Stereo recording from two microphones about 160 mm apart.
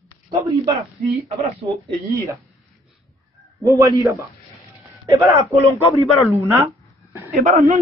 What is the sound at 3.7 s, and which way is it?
A man's voice, 20° right (ahead or behind).